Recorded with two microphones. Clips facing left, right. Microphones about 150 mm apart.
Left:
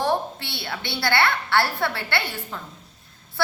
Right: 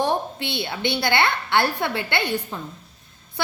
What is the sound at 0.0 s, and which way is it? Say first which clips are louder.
A woman's voice: right 1 dB; 20° right (ahead or behind).